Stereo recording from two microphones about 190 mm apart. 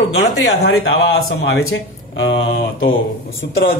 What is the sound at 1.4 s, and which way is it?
Speech, 60° left (ahead or behind).